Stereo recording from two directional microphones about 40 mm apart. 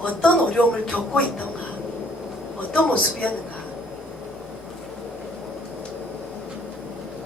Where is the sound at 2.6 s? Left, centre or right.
Left.